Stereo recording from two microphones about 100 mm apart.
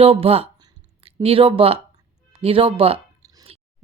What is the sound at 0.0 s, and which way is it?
Speech, 70° right (ahead or behind).